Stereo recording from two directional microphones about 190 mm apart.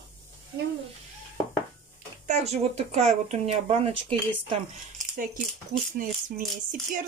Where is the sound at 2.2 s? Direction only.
35° right (ahead or behind).